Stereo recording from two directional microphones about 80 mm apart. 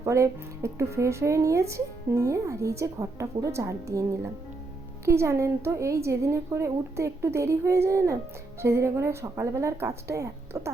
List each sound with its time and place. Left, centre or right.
0.0 s speech: right
5.0 s speech: right